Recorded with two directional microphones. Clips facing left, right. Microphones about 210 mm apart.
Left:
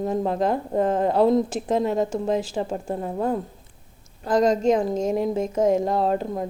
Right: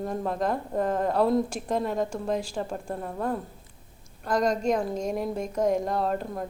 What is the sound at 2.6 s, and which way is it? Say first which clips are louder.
Speech: left 5 dB; 25° left (ahead or behind).